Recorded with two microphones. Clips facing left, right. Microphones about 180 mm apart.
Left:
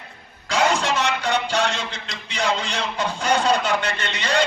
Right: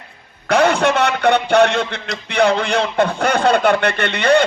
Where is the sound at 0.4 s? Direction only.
60° right (ahead or behind).